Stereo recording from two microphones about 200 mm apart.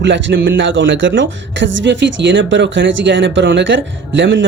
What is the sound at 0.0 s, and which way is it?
Speech, 65° right (ahead or behind).